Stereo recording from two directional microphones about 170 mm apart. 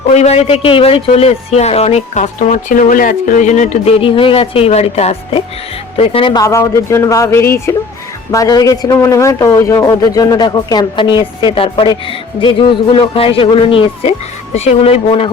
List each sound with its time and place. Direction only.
0.1 s speech: 40° left (ahead or behind)
6.4 s speech: 15° left (ahead or behind); by 15.3 s 35° left (ahead or behind)